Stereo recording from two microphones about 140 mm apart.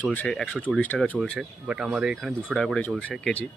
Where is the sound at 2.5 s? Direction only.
5° left (ahead or behind).